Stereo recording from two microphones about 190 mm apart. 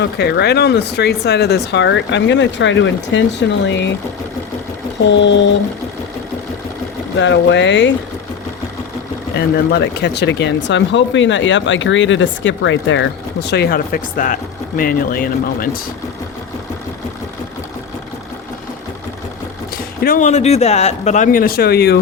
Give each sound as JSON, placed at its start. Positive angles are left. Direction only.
{"t": 0.0, "sound": "speech", "side_deg": 60}
{"t": 5.0, "sound": "speech", "side_deg": 70}
{"t": 7.2, "sound": "speech", "side_deg": 70}
{"t": 9.3, "sound": "speech", "side_deg": 55}
{"t": 19.7, "sound": "speech", "side_deg": 50}